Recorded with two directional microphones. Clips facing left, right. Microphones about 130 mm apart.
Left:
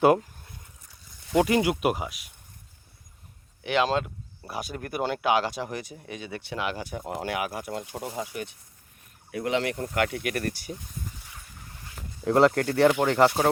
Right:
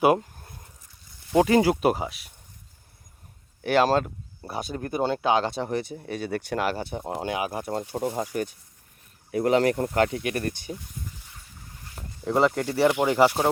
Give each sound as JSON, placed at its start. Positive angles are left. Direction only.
{"t": 1.3, "sound": "speech", "side_deg": -30}
{"t": 3.6, "sound": "speech", "side_deg": -40}
{"t": 4.4, "sound": "speech", "side_deg": -25}
{"t": 6.7, "sound": "speech", "side_deg": -30}
{"t": 7.7, "sound": "speech", "side_deg": -35}
{"t": 12.2, "sound": "speech", "side_deg": 0}